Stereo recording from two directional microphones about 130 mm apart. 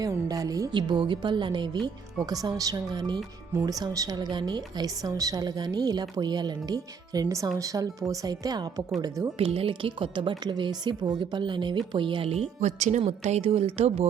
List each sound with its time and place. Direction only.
0.0 s a woman's voice: 30° right (ahead or behind)
9.4 s speech: 45° right (ahead or behind)